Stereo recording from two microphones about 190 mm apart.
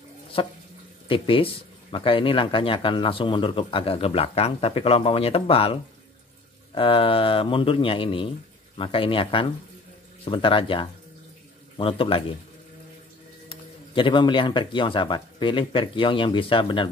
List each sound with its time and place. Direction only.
0.4 s speech: 30° left (ahead or behind)
13.5 s speech: 25° left (ahead or behind)